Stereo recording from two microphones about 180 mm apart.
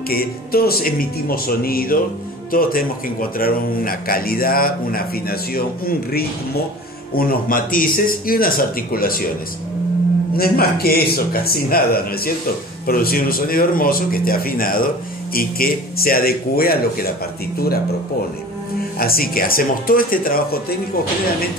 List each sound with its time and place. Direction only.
0.1 s a man's voice: 55° left (ahead or behind)
10.3 s a man's voice: 55° left (ahead or behind)
18.9 s speech: 55° left (ahead or behind)